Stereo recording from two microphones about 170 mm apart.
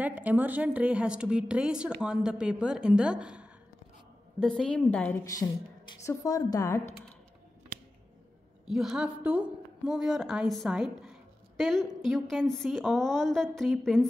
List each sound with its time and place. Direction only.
0.0 s a woman's voice: 10° right (ahead or behind); by 5.1 s 5° left (ahead or behind)
5.2 s a woman's voice: 20° left (ahead or behind)
8.6 s a woman's voice: 5° right (ahead or behind)